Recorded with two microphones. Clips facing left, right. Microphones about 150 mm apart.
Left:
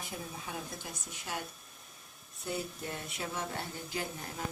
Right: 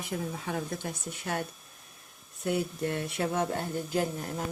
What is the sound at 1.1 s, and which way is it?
Speech, 60° right (ahead or behind).